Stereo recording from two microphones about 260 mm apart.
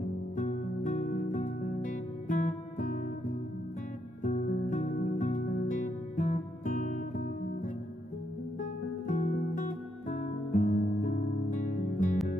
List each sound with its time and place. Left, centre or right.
0.4 s music: left
4.2 s music: left
9.0 s music: left